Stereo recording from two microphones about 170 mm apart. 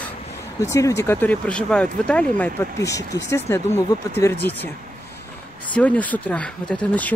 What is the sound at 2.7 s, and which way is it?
Speech, 20° left (ahead or behind).